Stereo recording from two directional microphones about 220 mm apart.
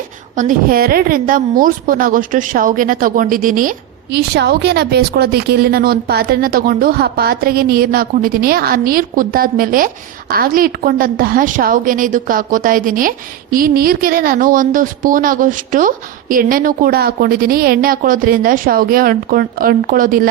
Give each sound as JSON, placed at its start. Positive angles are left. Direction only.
{"t": 0.3, "sound": "a woman's voice", "side_deg": -40}